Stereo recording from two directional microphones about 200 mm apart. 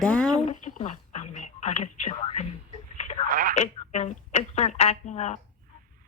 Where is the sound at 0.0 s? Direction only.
5° left (ahead or behind).